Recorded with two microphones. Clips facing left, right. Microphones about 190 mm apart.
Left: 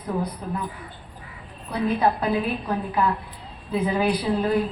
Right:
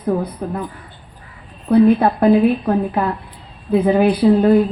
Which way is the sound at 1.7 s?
55° right (ahead or behind).